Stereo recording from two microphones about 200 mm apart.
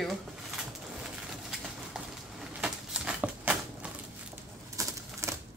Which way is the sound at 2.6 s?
5° right (ahead or behind).